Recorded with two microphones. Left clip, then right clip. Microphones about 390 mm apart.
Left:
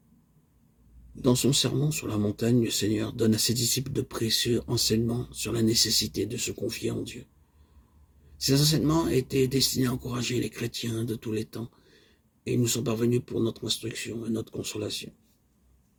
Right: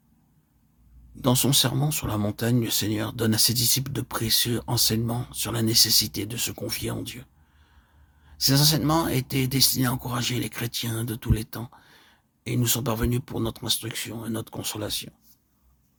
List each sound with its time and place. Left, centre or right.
1.1 s speech: right
8.4 s speech: right